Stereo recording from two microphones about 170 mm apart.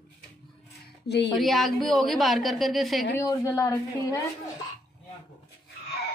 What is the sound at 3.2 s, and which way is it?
A woman's voice, 20° left (ahead or behind).